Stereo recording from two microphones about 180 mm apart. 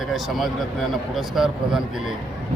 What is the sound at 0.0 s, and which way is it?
A man's voice, centre (ahead or behind).